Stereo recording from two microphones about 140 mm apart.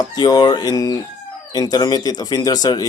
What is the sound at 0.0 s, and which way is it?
Crowing, 30° left (ahead or behind).